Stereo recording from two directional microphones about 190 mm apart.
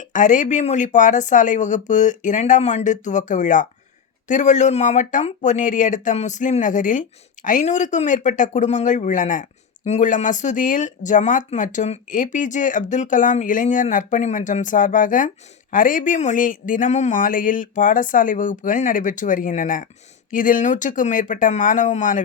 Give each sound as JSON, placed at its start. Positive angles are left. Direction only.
{"t": 0.0, "sound": "a man's voice", "side_deg": 40}